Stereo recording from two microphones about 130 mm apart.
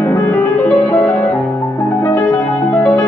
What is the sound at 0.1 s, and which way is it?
Music, 10° left (ahead or behind).